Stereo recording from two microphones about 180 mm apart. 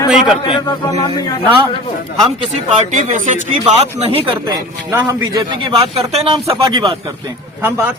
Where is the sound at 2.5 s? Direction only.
40° right (ahead or behind).